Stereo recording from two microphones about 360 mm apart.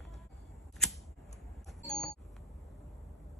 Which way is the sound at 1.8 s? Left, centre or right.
Centre.